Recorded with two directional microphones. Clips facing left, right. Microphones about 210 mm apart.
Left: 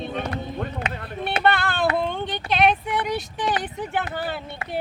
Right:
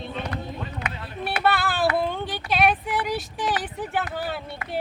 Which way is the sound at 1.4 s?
5° right (ahead or behind).